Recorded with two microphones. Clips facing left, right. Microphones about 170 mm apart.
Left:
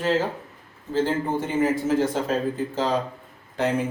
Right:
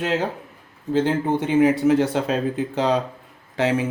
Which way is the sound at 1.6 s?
70° right (ahead or behind).